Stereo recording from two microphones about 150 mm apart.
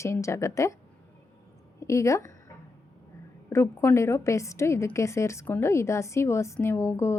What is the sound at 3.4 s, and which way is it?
A woman's voice, 20° left (ahead or behind).